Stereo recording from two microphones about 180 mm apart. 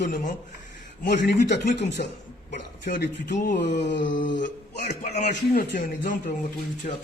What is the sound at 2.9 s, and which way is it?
A man's voice, 50° left (ahead or behind).